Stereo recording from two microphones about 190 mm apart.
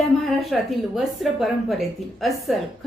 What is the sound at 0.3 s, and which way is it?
A woman's voice, centre (ahead or behind).